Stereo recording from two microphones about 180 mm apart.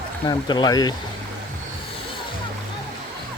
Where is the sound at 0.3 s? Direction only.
25° left (ahead or behind).